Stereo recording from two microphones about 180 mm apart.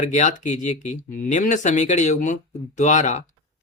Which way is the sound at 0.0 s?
40° left (ahead or behind).